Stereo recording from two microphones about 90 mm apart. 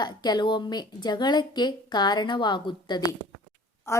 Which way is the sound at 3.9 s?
30° left (ahead or behind).